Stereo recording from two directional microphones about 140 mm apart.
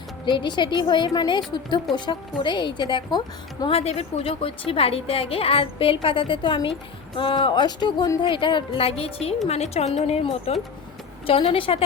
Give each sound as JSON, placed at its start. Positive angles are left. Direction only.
{"t": 0.3, "sound": "a woman's voice", "side_deg": 35}